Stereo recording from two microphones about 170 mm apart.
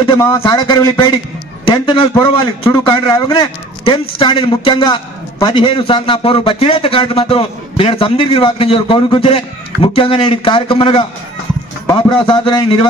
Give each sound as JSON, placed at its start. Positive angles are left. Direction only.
{"t": 0.0, "sound": "a man's voice", "side_deg": 20}